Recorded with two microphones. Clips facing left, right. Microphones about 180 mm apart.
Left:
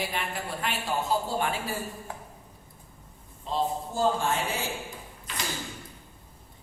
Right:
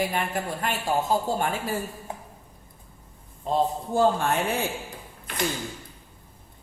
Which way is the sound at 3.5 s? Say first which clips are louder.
Right 5 dB; 60° right (ahead or behind).